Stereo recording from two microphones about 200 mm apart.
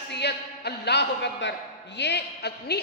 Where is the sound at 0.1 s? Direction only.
55° left (ahead or behind).